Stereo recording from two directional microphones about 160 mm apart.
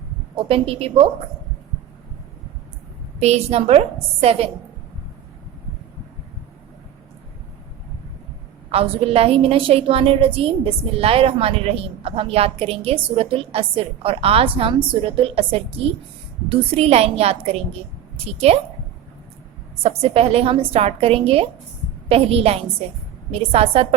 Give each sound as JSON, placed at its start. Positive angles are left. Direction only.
{"t": 0.3, "sound": "a woman's voice", "side_deg": -35}
{"t": 3.2, "sound": "a woman's voice", "side_deg": -40}
{"t": 8.7, "sound": "a woman's voice", "side_deg": -35}
{"t": 20.0, "sound": "a woman's voice", "side_deg": -40}